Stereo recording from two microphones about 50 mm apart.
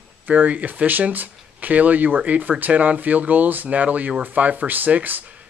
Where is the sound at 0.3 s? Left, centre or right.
Right.